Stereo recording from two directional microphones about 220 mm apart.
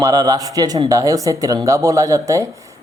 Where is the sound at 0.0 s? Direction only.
15° right (ahead or behind).